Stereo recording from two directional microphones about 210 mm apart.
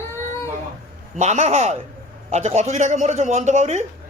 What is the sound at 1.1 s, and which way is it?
Speech, 35° right (ahead or behind).